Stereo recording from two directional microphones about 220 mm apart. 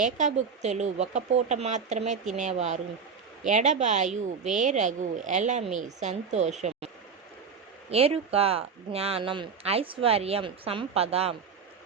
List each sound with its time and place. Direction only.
0.0 s speech: 35° right (ahead or behind)